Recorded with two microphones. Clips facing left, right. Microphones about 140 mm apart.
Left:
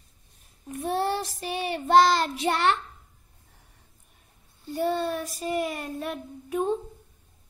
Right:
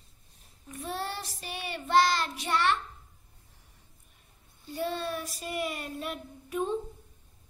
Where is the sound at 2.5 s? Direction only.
65° left (ahead or behind).